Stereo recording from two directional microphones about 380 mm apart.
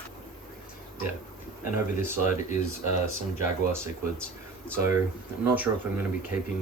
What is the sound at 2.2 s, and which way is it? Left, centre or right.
Speech, centre.